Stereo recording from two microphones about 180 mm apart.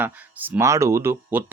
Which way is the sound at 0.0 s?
10° right (ahead or behind).